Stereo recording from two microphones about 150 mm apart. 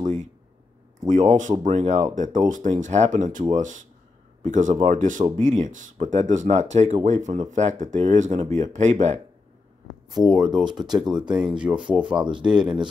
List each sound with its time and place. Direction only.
0.0 s a sound: 55° right (ahead or behind)
1.0 s speech: 55° right (ahead or behind)
10.1 s speech: centre (ahead or behind)